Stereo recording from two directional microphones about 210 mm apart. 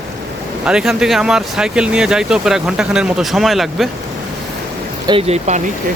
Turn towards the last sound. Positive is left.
turn(degrees=-30)  # may be behind; listen again after turning